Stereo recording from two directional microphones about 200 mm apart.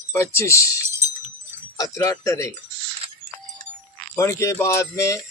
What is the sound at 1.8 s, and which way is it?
Speech, 15° left (ahead or behind).